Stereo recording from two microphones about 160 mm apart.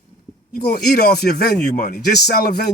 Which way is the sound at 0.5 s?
80° left.